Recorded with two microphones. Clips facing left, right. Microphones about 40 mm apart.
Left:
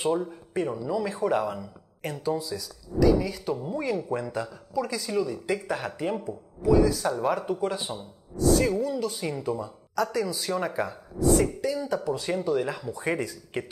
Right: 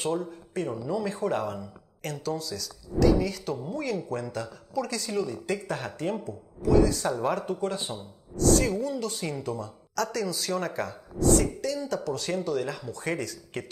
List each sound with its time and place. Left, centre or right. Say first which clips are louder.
0.0 s speech: left 3 dB; centre
6.9 s speech: left 1 dB; centre